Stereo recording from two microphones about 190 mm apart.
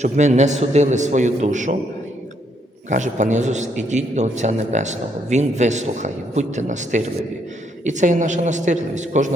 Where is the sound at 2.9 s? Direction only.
40° right (ahead or behind).